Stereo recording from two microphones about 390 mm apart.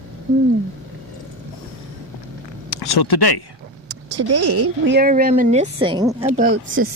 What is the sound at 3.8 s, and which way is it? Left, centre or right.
Speech, right.